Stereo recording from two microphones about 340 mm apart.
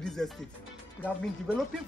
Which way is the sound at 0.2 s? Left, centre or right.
Centre.